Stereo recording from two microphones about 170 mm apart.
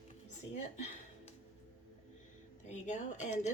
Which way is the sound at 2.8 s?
45° left (ahead or behind).